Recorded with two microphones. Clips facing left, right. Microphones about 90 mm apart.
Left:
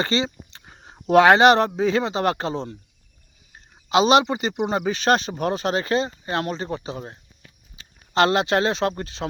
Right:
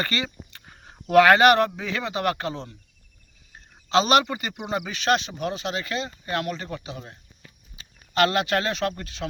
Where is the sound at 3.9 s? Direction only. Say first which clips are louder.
Left 3 dB; 20° left (ahead or behind).